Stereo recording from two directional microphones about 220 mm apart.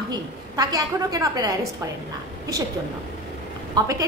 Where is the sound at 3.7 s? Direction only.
15° right (ahead or behind).